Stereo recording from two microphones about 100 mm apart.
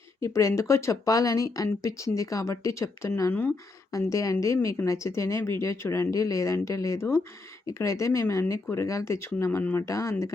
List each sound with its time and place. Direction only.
0.2 s speech: 30° left (ahead or behind)